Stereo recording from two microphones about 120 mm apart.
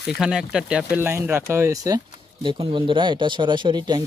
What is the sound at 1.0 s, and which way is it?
Speech, 20° right (ahead or behind).